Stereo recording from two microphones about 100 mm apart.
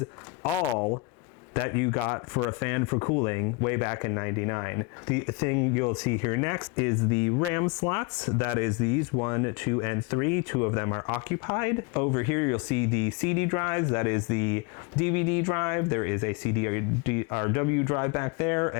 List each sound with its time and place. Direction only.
1.7 s speech: 30° left (ahead or behind)